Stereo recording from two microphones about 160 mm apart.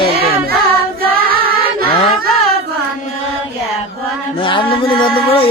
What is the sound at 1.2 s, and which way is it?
Music, 70° right (ahead or behind).